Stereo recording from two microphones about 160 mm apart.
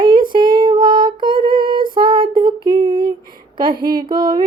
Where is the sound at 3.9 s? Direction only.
30° right (ahead or behind).